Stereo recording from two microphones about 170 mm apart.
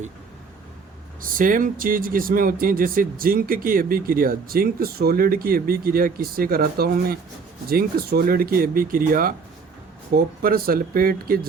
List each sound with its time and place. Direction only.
1.2 s speech: 55° right (ahead or behind)
10.4 s speech: 60° right (ahead or behind)